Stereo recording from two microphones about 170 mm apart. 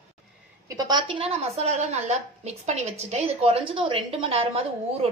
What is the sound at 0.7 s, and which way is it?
A woman's voice, 25° right (ahead or behind).